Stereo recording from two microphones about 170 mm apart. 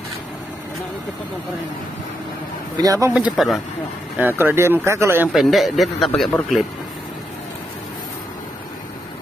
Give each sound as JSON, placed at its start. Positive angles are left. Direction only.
{"t": 2.8, "sound": "speech", "side_deg": -20}
{"t": 3.3, "sound": "speech", "side_deg": 0}
{"t": 4.2, "sound": "speech", "side_deg": -10}
{"t": 5.3, "sound": "speech", "side_deg": 0}